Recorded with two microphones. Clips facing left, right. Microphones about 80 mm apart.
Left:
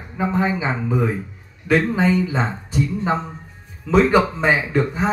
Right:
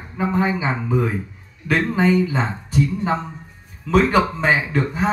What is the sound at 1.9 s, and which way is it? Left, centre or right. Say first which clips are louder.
Music: right 1 dB; centre.